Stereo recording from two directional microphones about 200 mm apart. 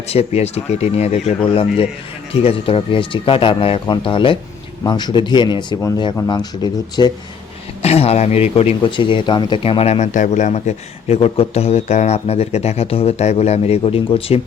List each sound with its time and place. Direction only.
0.1 s speech: 30° left (ahead or behind)
7.8 s speech: 30° left (ahead or behind)